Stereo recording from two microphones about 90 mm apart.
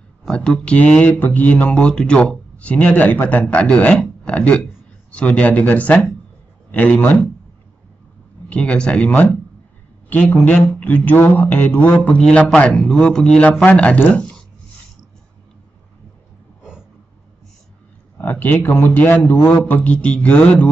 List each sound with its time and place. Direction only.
0.2 s a man's voice: 5° left (ahead or behind)
8.5 s speech: 15° left (ahead or behind)
18.1 s a man's voice: 20° left (ahead or behind)